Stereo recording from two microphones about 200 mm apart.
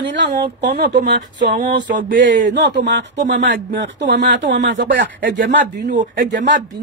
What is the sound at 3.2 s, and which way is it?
Speech, 40° right (ahead or behind).